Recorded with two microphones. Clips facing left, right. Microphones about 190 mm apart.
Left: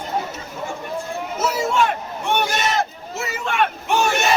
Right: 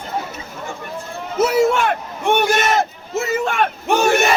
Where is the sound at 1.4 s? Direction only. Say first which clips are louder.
Right 5 dB; 60° right (ahead or behind); by 4.1 s 40° right (ahead or behind).